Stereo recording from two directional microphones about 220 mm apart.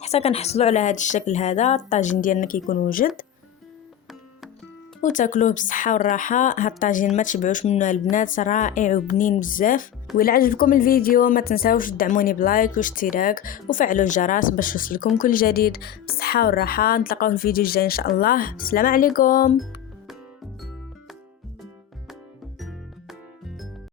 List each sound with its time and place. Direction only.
0.0 s speech: 30° left (ahead or behind)
5.0 s speech: 35° left (ahead or behind)